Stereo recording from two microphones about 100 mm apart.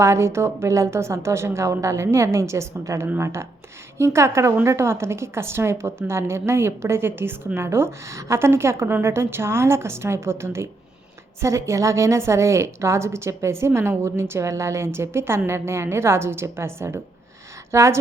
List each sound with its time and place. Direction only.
0.0 s a woman's voice: 30° right (ahead or behind)